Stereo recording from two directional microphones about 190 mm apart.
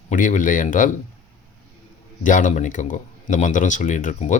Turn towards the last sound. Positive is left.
turn(degrees=40)  # may be behind; listen again after turning